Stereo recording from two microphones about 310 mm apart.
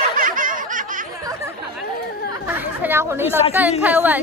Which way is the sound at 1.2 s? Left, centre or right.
Centre.